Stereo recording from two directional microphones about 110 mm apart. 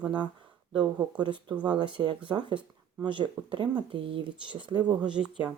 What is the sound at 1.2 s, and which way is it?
Speech, 45° right (ahead or behind).